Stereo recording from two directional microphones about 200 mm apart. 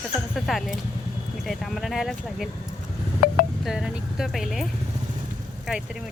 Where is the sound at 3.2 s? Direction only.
50° left (ahead or behind).